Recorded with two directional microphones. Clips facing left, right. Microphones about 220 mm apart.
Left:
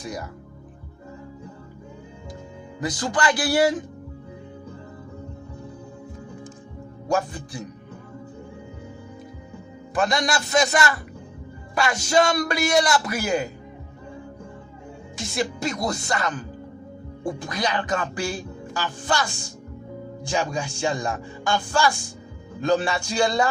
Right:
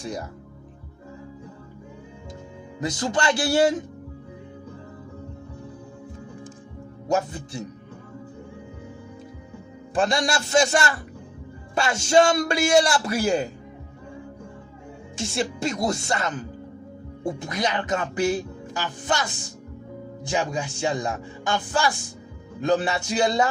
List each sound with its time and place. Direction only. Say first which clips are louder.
0.0 s speech: right 1 dB; 30° right (ahead or behind)
2.8 s speech: even; 25° right (ahead or behind)
7.1 s speech: even; 25° right (ahead or behind)
9.9 s speech: even; 30° right (ahead or behind)
15.1 s speech: even; 30° right (ahead or behind)